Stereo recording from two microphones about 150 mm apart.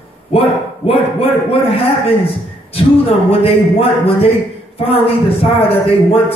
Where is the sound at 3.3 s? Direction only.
40° left (ahead or behind).